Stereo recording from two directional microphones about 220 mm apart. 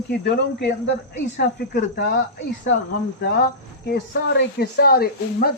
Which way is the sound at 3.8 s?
45° left (ahead or behind).